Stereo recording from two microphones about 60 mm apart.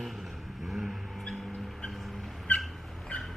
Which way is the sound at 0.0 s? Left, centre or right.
Centre.